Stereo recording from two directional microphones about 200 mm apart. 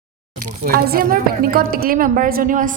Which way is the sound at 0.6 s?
50° right (ahead or behind).